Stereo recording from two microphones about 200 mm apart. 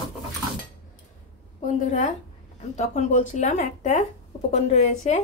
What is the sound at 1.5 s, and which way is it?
Speech, 40° left (ahead or behind).